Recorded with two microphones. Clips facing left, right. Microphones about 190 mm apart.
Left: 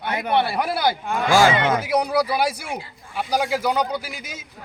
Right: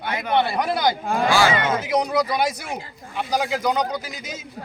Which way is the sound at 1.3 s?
45° left (ahead or behind).